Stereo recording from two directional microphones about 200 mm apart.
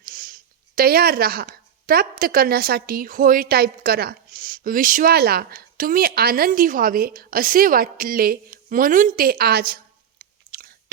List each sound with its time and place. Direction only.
0.0 s speech: 45° right (ahead or behind)